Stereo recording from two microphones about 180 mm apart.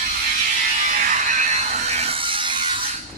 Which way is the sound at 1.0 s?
45° right (ahead or behind).